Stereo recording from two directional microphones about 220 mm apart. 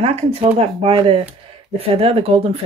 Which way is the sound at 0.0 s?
25° right (ahead or behind).